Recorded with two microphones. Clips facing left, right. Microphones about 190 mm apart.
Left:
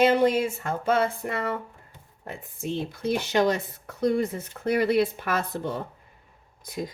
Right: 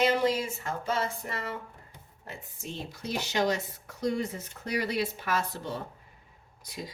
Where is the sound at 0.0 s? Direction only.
55° left (ahead or behind).